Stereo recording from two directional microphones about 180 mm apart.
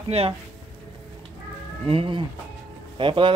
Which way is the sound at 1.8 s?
30° right (ahead or behind).